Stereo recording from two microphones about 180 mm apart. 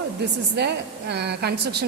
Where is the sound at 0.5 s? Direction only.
70° right (ahead or behind).